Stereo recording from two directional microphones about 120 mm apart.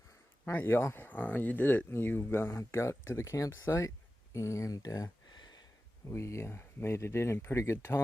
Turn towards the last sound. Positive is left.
turn(degrees=25)  # may be behind; listen again after turning